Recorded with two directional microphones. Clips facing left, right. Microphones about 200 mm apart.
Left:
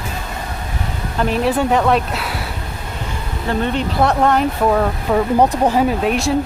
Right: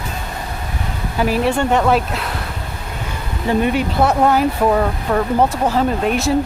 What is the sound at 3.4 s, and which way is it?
Speech, 10° right (ahead or behind).